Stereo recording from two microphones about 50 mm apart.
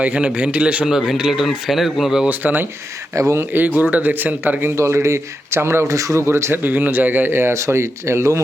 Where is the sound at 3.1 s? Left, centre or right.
Right.